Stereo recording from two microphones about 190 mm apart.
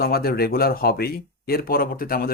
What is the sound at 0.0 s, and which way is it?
Speech, 55° left (ahead or behind).